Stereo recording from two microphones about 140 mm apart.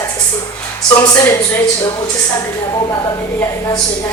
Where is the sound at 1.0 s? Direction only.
25° left (ahead or behind).